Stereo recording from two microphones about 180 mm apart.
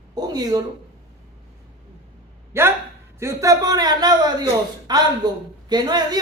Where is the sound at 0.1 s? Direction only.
20° right (ahead or behind).